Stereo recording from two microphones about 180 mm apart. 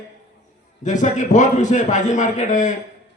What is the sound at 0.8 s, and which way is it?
A man's voice, 45° left (ahead or behind).